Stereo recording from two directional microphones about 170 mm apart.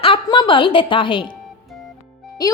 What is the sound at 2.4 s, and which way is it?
Speech, 20° left (ahead or behind).